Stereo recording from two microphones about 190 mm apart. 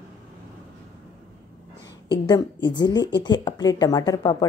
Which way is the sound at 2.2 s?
20° left (ahead or behind).